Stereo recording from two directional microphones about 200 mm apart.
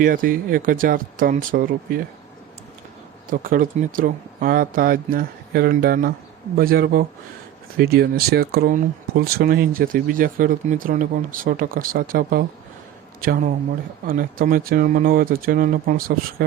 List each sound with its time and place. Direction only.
0.0 s speech: 45° right (ahead or behind)
3.2 s speech: 45° right (ahead or behind)